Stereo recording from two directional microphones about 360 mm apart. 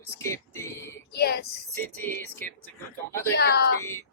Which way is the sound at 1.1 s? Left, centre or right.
Left.